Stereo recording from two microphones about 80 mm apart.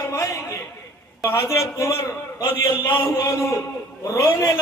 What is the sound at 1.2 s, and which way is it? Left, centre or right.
Speech, left.